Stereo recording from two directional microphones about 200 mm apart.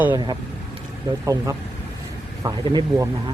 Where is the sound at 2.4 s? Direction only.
20° right (ahead or behind).